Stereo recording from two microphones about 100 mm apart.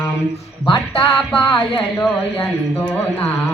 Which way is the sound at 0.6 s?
60° left (ahead or behind).